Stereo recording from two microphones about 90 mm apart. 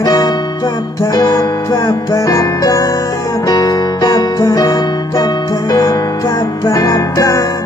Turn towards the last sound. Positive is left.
turn(degrees=40)  # may be behind; listen again after turning